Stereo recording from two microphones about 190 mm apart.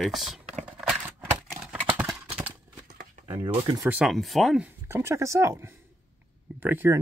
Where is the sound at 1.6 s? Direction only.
5° right (ahead or behind).